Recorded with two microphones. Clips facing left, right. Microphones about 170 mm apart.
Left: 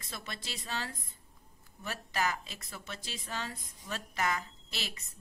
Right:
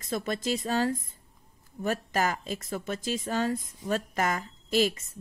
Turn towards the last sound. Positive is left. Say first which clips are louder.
# right 18 dB
turn(degrees=-45)  # may be behind; listen again after turning